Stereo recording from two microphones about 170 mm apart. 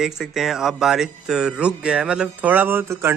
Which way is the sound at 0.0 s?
Centre (ahead or behind).